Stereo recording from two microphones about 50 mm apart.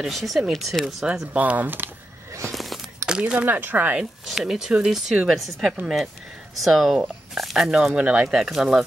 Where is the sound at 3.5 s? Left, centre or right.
Right.